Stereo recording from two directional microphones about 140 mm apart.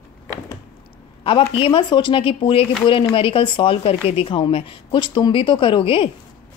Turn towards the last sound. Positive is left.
turn(degrees=40)  # may be behind; listen again after turning